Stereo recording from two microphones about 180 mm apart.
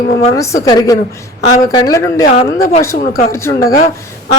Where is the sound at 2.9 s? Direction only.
50° left (ahead or behind).